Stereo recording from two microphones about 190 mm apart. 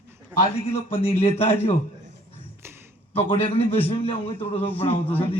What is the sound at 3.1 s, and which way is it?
A man's voice, 30° left (ahead or behind).